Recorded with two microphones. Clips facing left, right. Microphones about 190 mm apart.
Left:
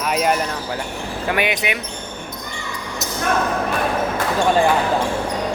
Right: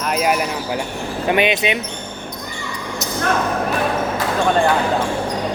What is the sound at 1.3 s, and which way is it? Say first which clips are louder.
Speech: right 4 dB; 20° right (ahead or behind).